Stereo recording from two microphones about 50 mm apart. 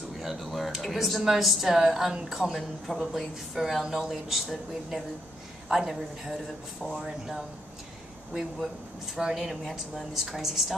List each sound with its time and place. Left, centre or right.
0.2 s a woman's voice: centre
5.7 s a woman's voice: centre
7.1 s a woman's voice: centre